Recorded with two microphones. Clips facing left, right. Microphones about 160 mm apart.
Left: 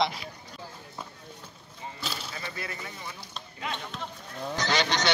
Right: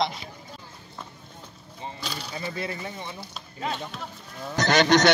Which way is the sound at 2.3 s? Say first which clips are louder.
Right 6 dB; 25° right (ahead or behind).